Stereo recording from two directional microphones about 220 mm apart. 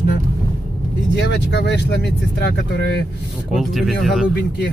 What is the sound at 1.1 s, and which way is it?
Speech, 50° left (ahead or behind).